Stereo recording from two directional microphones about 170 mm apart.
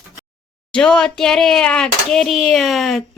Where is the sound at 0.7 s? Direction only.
5° left (ahead or behind).